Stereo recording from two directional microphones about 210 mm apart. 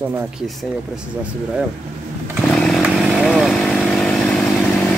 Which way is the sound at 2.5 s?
Centre (ahead or behind).